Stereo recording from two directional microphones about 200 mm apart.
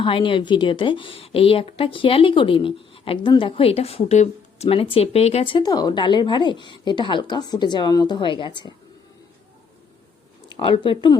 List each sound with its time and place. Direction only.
0.0 s a woman's voice: 25° left (ahead or behind)
10.5 s a woman's voice: 25° left (ahead or behind)